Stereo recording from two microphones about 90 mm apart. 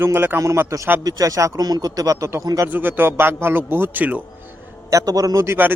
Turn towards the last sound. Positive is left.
turn(degrees=-30)  # may be behind; listen again after turning